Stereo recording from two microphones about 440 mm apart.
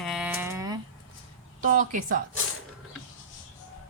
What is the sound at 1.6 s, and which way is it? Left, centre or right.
Speech, centre.